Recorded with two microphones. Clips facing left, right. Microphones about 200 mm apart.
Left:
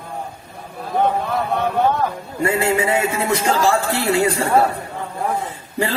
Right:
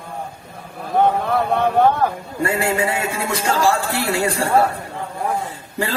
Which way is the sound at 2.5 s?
20° left (ahead or behind).